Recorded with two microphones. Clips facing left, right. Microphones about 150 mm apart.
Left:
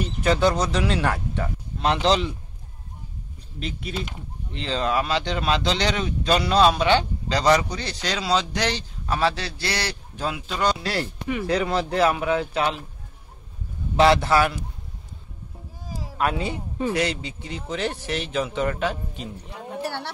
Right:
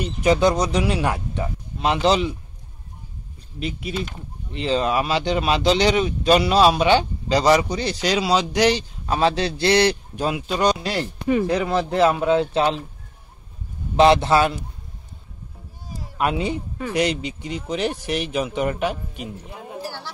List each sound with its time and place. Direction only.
0.2 s speech: 15° right (ahead or behind)
3.5 s speech: 5° right (ahead or behind); by 12.8 s 30° right (ahead or behind)
13.9 s speech: 20° right (ahead or behind)
16.2 s speech: 15° right (ahead or behind)
19.8 s a woman's voice: 65° left (ahead or behind)